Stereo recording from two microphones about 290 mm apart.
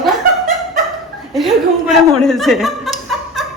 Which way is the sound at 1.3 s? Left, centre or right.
Centre.